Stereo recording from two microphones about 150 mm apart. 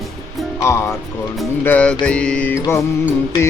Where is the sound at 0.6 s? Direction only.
20° left (ahead or behind).